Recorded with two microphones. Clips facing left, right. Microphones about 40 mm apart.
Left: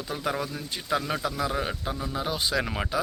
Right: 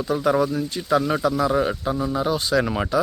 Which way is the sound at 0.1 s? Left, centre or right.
Centre.